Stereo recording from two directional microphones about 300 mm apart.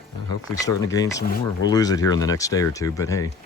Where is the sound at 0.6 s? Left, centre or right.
Centre.